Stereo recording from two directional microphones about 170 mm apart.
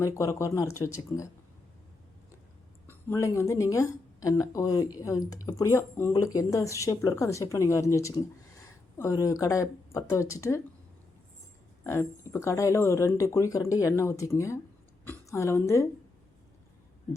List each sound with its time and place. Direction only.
0.0 s speech: 15° left (ahead or behind)
3.1 s speech: 15° left (ahead or behind)
11.8 s speech: 15° left (ahead or behind)